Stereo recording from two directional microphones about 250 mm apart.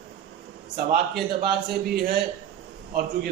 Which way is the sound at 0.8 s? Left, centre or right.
Right.